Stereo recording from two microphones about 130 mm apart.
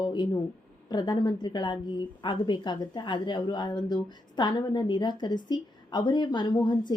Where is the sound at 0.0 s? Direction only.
35° left (ahead or behind).